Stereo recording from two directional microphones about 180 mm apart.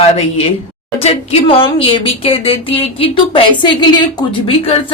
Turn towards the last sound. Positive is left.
turn(degrees=30)  # may be behind; listen again after turning